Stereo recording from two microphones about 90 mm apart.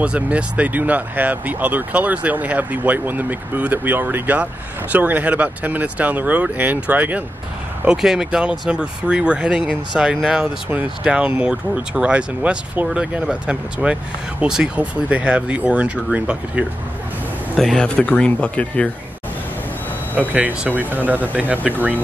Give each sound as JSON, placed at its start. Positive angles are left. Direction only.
{"t": 0.0, "sound": "speech", "side_deg": -15}
{"t": 7.8, "sound": "speech", "side_deg": -5}
{"t": 17.6, "sound": "speech", "side_deg": 5}
{"t": 20.2, "sound": "speech", "side_deg": -20}